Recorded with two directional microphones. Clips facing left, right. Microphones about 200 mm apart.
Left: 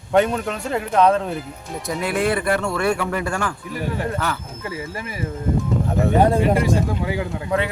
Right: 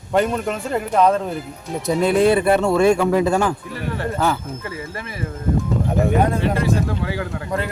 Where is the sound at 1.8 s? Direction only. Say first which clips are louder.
Right 6 dB; 25° right (ahead or behind).